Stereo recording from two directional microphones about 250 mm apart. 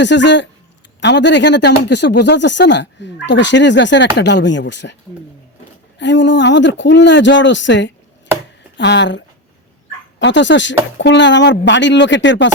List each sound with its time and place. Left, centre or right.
0.0 s speech: left
6.0 s speech: left